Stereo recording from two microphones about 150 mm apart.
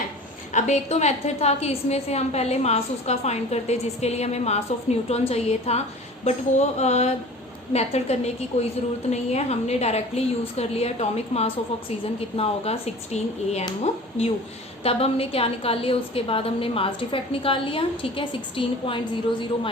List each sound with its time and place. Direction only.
0.5 s a woman's voice: 50° left (ahead or behind)